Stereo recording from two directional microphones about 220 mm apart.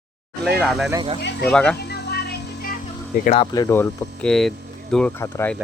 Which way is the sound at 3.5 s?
15° left (ahead or behind).